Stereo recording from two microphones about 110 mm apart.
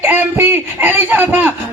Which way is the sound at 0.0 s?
20° right (ahead or behind).